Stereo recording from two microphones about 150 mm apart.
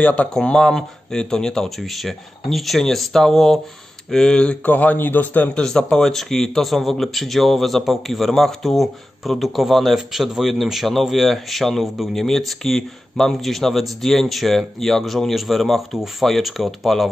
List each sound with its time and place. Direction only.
0.0 s speech: 10° left (ahead or behind)